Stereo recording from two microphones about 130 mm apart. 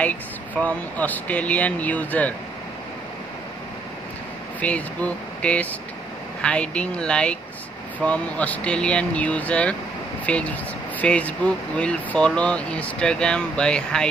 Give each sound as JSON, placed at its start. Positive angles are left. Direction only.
{"t": 0.0, "sound": "speech", "side_deg": 10}
{"t": 4.6, "sound": "speech", "side_deg": 10}